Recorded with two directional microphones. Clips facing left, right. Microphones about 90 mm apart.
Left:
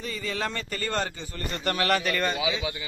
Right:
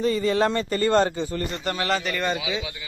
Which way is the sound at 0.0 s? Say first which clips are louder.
Right 10 dB; 35° right (ahead or behind).